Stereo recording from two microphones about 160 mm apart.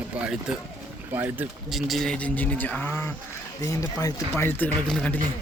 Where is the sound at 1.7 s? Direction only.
Centre (ahead or behind).